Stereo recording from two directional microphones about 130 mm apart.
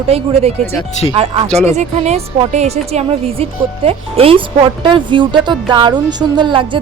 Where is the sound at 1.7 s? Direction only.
60° right (ahead or behind).